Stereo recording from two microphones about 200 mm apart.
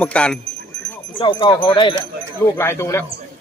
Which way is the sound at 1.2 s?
20° left (ahead or behind).